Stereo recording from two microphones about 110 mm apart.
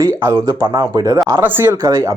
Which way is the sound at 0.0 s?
25° right (ahead or behind).